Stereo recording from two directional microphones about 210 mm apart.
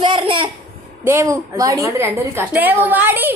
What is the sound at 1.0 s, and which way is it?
A woman's voice, 10° right (ahead or behind).